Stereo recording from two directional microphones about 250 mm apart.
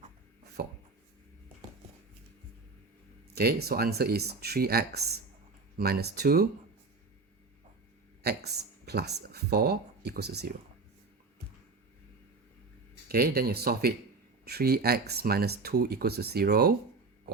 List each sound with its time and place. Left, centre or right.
0.6 s speech: right
3.3 s speech: right
8.2 s speech: right
13.1 s speech: right